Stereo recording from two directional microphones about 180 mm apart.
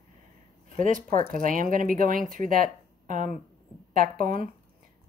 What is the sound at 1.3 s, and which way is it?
Speech, 50° right (ahead or behind).